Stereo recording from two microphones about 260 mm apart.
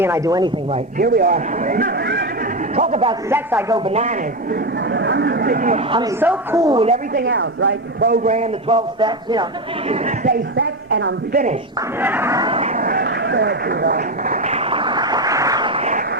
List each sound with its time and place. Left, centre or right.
0.0 s a man's voice: centre
0.9 s a man's voice: right
2.7 s speech: right
3.2 s a man's voice: centre
3.8 s speech: right
4.9 s speech: right
6.1 s speech: centre; by 8.1 s right
8.1 s speech: right
10.9 s a woman's voice: right
11.9 s vehicle: centre; by 16.0 s right